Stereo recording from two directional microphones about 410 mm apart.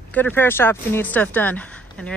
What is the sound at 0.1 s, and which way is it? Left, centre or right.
Speech, centre.